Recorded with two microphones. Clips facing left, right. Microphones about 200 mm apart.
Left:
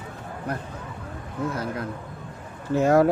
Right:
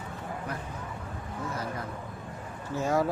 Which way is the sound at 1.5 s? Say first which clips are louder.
Left 5 dB; 70° left (ahead or behind).